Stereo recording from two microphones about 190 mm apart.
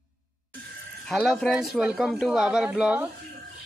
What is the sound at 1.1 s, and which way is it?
Speech, centre (ahead or behind).